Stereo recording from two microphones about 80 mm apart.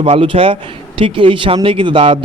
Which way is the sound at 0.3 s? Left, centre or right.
Right.